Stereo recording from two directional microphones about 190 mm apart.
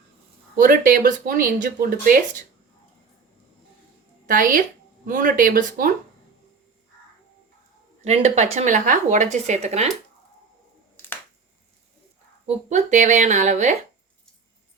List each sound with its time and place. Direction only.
0.5 s speech: 45° right (ahead or behind)
4.3 s speech: 45° right (ahead or behind)
8.0 s speech: 35° right (ahead or behind)
12.5 s speech: 35° right (ahead or behind)